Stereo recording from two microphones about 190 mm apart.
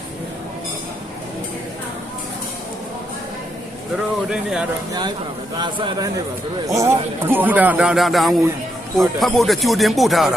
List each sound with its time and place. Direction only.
4.3 s speech: centre (ahead or behind)
5.5 s speech: 25° right (ahead or behind); by 10.3 s centre (ahead or behind)